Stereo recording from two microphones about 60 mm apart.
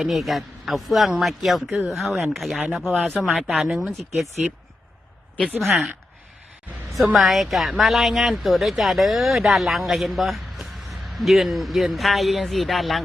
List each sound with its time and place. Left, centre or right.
0.0 s a woman's voice: centre
3.3 s speech: centre
3.6 s a woman's voice: centre
5.5 s a woman's voice: centre
6.9 s a woman's voice: centre